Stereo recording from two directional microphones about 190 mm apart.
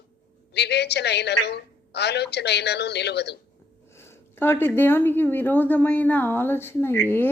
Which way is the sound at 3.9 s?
15° left (ahead or behind).